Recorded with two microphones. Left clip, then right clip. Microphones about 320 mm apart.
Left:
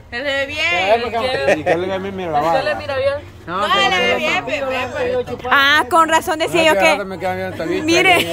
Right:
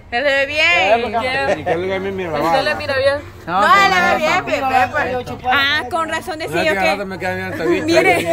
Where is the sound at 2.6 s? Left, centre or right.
Right.